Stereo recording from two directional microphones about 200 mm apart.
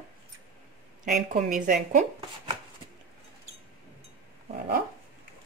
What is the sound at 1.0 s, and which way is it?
Speech, 40° right (ahead or behind).